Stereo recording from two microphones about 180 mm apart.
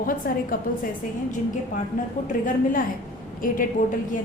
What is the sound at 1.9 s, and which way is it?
A woman's voice, 45° left (ahead or behind).